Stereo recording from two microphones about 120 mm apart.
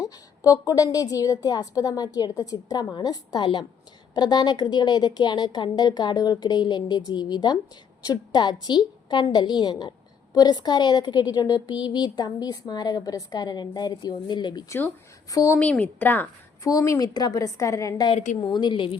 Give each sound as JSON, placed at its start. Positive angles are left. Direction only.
{"t": 0.0, "sound": "a woman's voice", "side_deg": 25}
{"t": 15.3, "sound": "a woman's voice", "side_deg": 30}
{"t": 15.5, "sound": "a woman's voice", "side_deg": 10}
{"t": 16.6, "sound": "a woman's voice", "side_deg": 30}
{"t": 18.3, "sound": "a woman's voice", "side_deg": 40}